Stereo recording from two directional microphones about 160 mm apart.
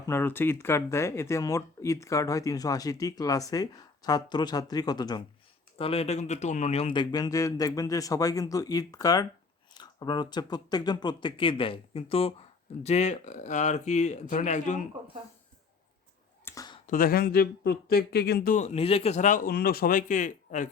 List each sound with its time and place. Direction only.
0.1 s speech: 15° left (ahead or behind)
5.7 s a man's voice: 40° left (ahead or behind)
16.4 s a sound: 15° left (ahead or behind)
16.8 s speech: 60° left (ahead or behind); by 18.5 s 85° left
18.5 s a man's voice: 45° left (ahead or behind)